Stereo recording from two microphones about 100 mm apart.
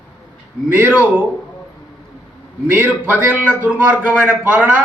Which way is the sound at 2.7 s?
20° right (ahead or behind).